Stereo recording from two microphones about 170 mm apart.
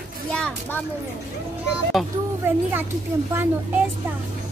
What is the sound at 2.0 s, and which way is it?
Speech, centre (ahead or behind).